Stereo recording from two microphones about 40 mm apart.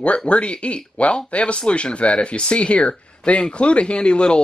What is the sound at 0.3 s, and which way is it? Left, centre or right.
Speech, left.